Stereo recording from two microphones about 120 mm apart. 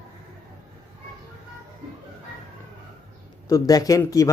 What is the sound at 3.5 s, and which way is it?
Speech, 30° left (ahead or behind).